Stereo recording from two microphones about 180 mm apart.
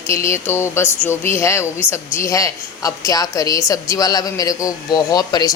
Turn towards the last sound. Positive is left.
turn(degrees=20)  # may be behind; listen again after turning